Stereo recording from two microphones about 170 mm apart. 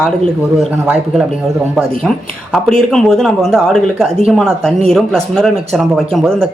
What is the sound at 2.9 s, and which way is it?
Speech, 5° left (ahead or behind).